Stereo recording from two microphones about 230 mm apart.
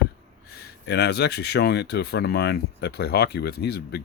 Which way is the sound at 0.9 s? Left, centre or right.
Left.